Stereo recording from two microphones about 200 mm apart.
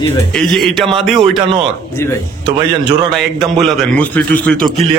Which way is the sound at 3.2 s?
Centre (ahead or behind).